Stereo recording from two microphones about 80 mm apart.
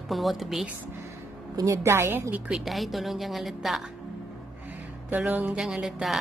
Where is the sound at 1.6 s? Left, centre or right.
Right.